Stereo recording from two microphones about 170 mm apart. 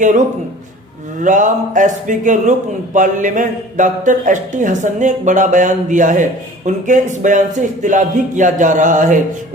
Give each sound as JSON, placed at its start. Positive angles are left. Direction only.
{"t": 1.2, "sound": "a man's voice", "side_deg": -50}